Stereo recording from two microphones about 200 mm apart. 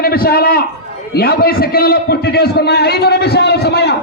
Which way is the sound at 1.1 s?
50° left (ahead or behind).